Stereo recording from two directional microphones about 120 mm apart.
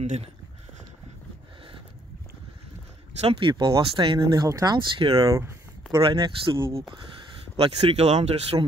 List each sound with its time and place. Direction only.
0.0 s speech: 75° right (ahead or behind)
3.2 s speech: 55° right (ahead or behind); by 4.7 s 30° right (ahead or behind)
4.7 s speech: 45° right (ahead or behind)
5.1 s speech: 30° right (ahead or behind)
6.1 s speech: 40° right (ahead or behind)
7.5 s speech: 55° right (ahead or behind)